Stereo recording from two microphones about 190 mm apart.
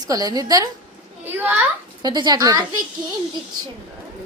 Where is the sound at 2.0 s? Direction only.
20° right (ahead or behind).